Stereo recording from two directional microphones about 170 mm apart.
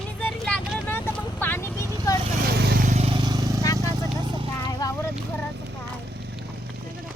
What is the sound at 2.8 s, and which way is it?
Vehicle, 35° right (ahead or behind).